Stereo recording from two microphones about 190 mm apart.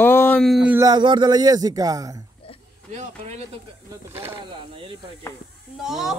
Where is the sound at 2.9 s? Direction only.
35° right (ahead or behind).